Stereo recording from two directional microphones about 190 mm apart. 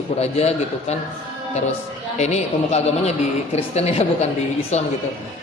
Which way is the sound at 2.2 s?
35° left (ahead or behind).